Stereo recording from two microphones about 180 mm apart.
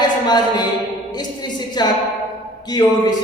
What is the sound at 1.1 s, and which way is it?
A woman's voice, 25° left (ahead or behind).